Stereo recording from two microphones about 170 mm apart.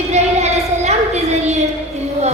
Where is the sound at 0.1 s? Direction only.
40° right (ahead or behind).